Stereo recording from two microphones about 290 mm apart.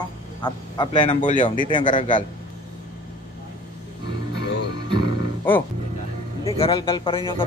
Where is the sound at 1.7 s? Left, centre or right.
Centre.